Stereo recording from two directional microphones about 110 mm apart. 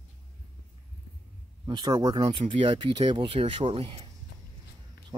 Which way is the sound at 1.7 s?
40° right (ahead or behind).